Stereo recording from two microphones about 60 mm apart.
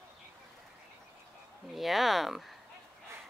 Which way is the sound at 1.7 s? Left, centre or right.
Centre.